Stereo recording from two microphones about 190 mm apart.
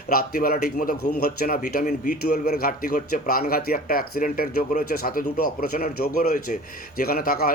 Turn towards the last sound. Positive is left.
turn(degrees=50)  # may be behind; listen again after turning